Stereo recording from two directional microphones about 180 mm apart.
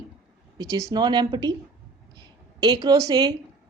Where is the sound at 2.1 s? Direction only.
25° right (ahead or behind).